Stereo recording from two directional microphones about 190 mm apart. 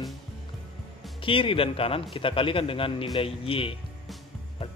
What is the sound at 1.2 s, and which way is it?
A man's voice, 25° left (ahead or behind).